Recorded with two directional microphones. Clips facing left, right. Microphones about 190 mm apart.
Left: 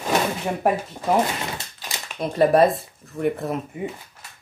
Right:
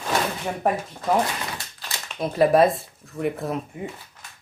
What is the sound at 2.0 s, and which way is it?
Speech, centre (ahead or behind).